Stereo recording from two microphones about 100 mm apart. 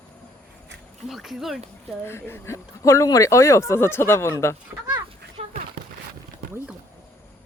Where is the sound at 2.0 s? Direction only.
25° left (ahead or behind).